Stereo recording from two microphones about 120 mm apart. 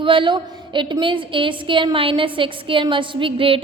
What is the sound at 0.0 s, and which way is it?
A woman's voice, 45° right (ahead or behind).